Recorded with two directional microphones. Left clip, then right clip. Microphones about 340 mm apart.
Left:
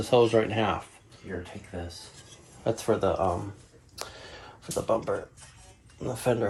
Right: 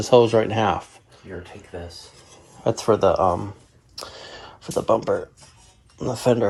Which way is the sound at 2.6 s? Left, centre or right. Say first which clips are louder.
Right 8 dB; right.